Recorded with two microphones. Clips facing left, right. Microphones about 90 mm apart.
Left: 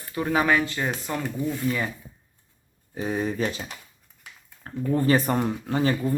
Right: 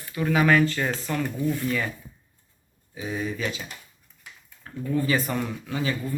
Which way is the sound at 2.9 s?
45° left (ahead or behind).